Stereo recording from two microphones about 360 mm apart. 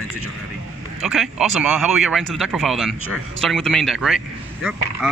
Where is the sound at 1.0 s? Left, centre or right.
Centre.